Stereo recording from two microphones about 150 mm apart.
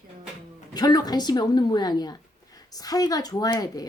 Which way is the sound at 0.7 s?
25° left (ahead or behind).